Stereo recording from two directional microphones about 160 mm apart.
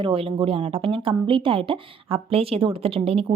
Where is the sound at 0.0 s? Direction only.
35° right (ahead or behind).